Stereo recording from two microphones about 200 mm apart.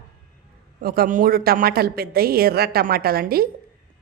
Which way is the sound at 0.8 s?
50° right (ahead or behind).